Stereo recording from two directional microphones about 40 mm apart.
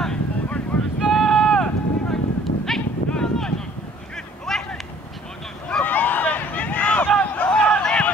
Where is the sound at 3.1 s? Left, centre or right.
Centre.